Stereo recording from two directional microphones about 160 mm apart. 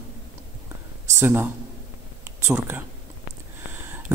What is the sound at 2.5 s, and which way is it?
Speech, 10° right (ahead or behind).